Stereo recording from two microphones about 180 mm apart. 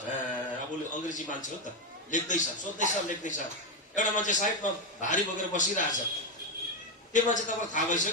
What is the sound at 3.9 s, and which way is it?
A man's voice, 45° left (ahead or behind).